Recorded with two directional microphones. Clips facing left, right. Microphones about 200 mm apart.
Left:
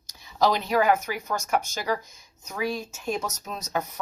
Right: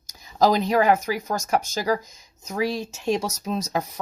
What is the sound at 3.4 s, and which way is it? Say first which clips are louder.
Speech: right 5 dB; 30° right (ahead or behind).